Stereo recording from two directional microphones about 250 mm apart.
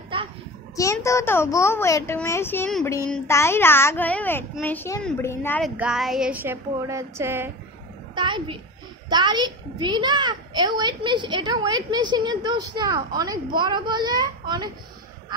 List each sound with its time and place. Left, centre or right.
0.1 s a sound: right
0.7 s a child's voice: centre
5.8 s a child's voice: centre